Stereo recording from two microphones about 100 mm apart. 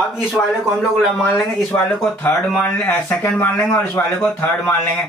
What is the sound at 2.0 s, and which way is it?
Speech, 20° left (ahead or behind).